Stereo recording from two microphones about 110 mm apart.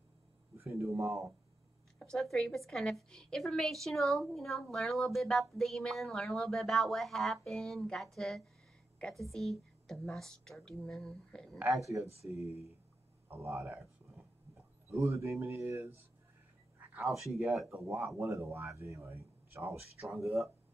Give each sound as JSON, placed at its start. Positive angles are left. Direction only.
{"t": 0.6, "sound": "speech", "side_deg": -25}
{"t": 2.0, "sound": "a woman's voice", "side_deg": 5}
{"t": 12.2, "sound": "speech", "side_deg": 70}
{"t": 13.3, "sound": "speech", "side_deg": -25}
{"t": 17.1, "sound": "a woman's voice", "side_deg": 0}
{"t": 18.0, "sound": "speech", "side_deg": -25}
{"t": 20.0, "sound": "a woman's voice", "side_deg": 0}